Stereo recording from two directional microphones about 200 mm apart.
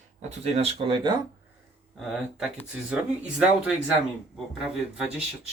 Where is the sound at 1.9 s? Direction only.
Centre (ahead or behind).